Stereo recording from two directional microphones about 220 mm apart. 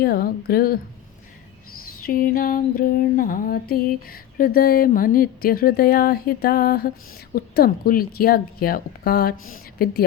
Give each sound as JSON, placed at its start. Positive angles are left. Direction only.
{"t": 0.0, "sound": "speech", "side_deg": 45}
{"t": 2.0, "sound": "a sound", "side_deg": 40}
{"t": 7.3, "sound": "speech", "side_deg": 45}